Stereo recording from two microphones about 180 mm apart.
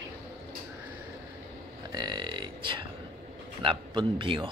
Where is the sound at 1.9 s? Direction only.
25° right (ahead or behind).